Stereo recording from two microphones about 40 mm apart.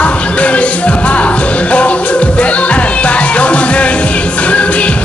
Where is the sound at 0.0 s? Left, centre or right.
Left.